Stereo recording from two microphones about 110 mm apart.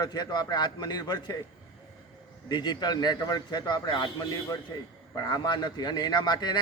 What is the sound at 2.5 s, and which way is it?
A man's voice, 40° left (ahead or behind).